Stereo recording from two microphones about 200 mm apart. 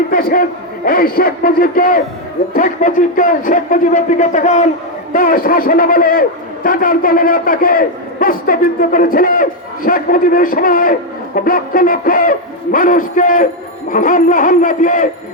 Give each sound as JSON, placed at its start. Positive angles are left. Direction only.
{"t": 0.1, "sound": "a man's voice", "side_deg": 50}